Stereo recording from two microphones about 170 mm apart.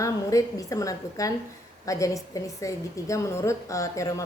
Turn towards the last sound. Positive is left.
turn(degrees=20)  # may be behind; listen again after turning